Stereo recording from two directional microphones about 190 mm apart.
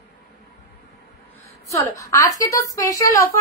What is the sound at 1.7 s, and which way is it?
A woman's voice, 15° left (ahead or behind).